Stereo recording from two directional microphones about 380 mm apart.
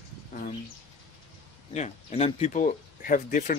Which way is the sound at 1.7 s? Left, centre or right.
Centre.